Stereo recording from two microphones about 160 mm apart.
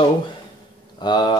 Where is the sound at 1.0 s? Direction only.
30° left (ahead or behind).